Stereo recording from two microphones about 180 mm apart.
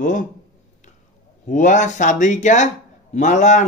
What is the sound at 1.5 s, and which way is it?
Speech, 45° left (ahead or behind).